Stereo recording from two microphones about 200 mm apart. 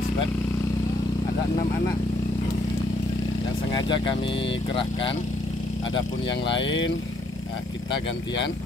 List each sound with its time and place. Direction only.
3.7 s speech: 25° left (ahead or behind)
6.4 s speech: 65° left (ahead or behind)